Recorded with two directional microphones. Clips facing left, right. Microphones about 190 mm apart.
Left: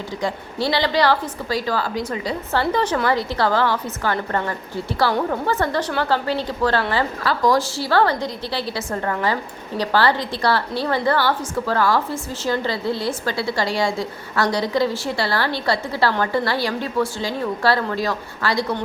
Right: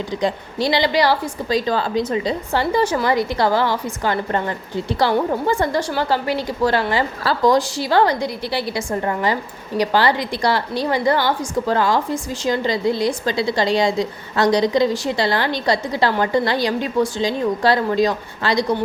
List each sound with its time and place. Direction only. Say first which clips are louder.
0.2 s a woman's voice: right 2 dB; 15° right (ahead or behind)